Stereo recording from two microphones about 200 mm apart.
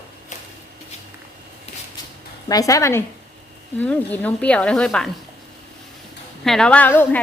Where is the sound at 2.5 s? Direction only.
15° left (ahead or behind).